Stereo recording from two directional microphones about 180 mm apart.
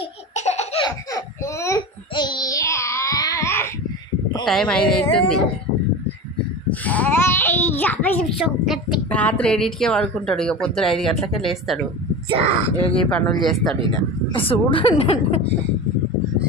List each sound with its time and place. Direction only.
0.3 s laughter: 40° left (ahead or behind)
0.8 s a sound: 20° left (ahead or behind)
4.5 s speech: 5° left (ahead or behind)
6.7 s a child's voice: 10° left (ahead or behind)
12.3 s speech: 30° right (ahead or behind)
12.7 s speech: 10° left (ahead or behind)
14.3 s a woman's voice: 30° left (ahead or behind)